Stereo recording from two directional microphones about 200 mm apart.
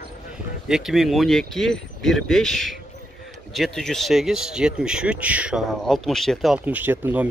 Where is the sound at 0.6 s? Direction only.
Centre (ahead or behind).